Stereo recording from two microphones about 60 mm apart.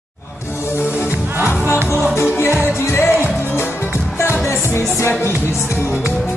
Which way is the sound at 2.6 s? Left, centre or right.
Left.